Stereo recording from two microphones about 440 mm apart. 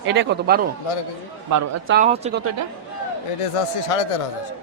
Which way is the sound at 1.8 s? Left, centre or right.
Centre.